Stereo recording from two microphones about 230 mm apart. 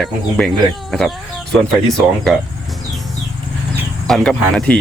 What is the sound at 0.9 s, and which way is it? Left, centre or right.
Chicken, centre.